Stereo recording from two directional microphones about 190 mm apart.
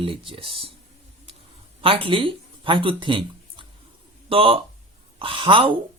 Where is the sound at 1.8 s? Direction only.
30° right (ahead or behind).